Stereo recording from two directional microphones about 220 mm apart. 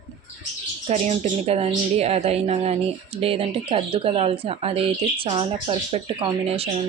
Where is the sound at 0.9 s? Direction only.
30° right (ahead or behind).